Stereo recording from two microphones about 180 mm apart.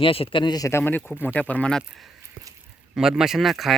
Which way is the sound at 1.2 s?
5° left (ahead or behind).